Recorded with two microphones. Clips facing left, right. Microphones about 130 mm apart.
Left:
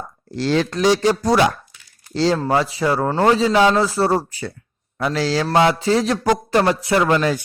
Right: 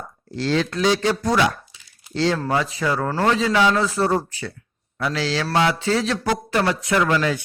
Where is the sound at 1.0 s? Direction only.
40° left (ahead or behind).